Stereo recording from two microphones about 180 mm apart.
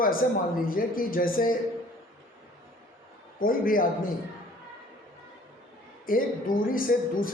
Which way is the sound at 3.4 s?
50° left (ahead or behind).